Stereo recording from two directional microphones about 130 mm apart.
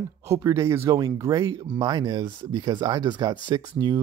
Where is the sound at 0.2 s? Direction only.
25° right (ahead or behind).